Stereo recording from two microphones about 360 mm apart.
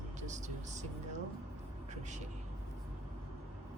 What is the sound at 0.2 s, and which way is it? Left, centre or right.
Speech, centre.